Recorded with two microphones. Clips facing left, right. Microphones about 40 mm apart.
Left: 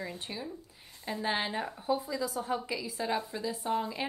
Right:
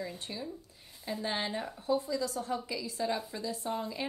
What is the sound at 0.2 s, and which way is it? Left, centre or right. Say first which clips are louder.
A woman's voice: left 1 dB; centre.